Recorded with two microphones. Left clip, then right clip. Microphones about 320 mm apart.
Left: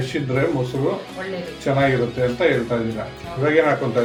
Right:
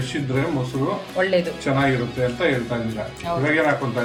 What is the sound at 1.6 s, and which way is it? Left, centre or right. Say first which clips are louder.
Speech: left 2 dB; centre.